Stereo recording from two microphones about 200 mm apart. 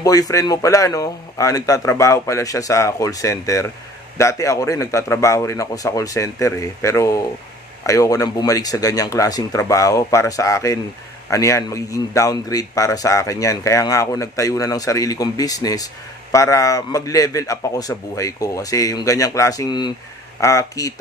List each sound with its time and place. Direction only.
0.0 s speech: 15° left (ahead or behind)